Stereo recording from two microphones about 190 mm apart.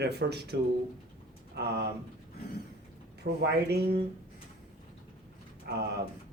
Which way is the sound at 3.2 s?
60° right (ahead or behind).